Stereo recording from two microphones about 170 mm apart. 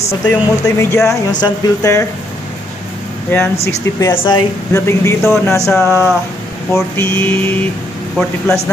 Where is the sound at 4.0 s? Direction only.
25° left (ahead or behind).